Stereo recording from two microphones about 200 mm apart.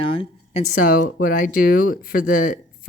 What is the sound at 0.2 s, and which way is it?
A woman's voice, 35° left (ahead or behind).